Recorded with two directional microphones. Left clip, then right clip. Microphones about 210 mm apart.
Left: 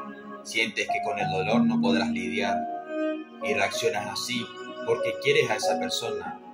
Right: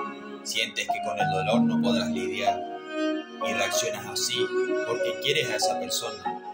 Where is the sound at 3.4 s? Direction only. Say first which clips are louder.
Left 1 dB; 40° right (ahead or behind).